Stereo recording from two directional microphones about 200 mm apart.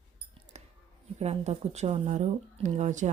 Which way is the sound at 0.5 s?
35° right (ahead or behind).